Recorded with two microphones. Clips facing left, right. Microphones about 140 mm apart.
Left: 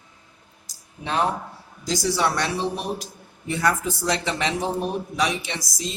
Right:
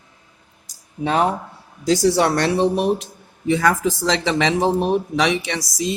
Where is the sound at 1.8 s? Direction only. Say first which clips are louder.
Right 7 dB; 65° right (ahead or behind).